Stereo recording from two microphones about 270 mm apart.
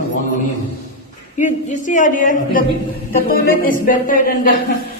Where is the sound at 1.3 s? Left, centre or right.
Left.